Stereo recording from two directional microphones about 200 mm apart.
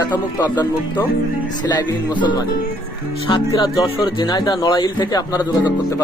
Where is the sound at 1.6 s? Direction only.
20° left (ahead or behind).